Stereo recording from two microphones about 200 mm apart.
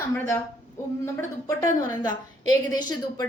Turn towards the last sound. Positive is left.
turn(degrees=20)  # may be behind; listen again after turning